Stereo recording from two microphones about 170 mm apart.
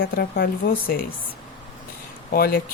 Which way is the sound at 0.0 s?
70° left (ahead or behind).